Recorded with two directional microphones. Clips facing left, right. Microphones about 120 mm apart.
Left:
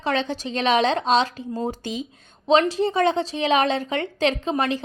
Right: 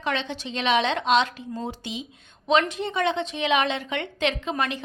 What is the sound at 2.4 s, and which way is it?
A woman's voice, 35° left (ahead or behind).